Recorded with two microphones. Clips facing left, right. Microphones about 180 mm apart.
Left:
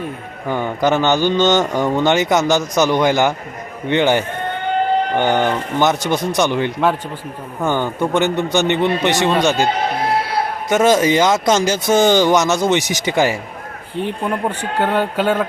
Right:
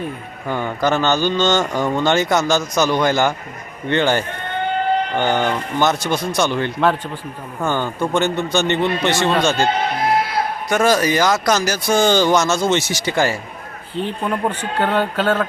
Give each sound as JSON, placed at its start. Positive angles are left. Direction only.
{"t": 0.4, "sound": "a man's voice", "side_deg": 15}
{"t": 10.7, "sound": "a man's voice", "side_deg": 20}